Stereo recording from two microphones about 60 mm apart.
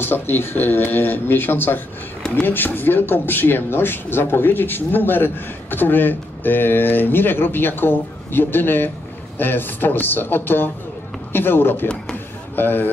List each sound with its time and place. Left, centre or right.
0.0 s speech: left